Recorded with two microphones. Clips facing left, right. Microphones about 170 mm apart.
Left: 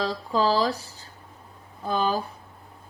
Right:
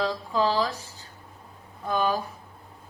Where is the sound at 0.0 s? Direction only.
35° left (ahead or behind).